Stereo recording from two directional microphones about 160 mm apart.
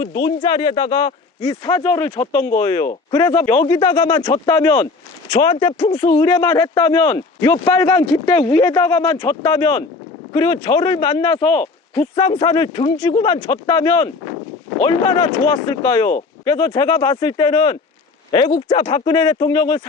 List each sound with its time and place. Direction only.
0.0 s speech: 30° left (ahead or behind)
1.8 s speech: 15° left (ahead or behind); by 6.1 s 35° left (ahead or behind)
6.1 s speech: 20° left (ahead or behind)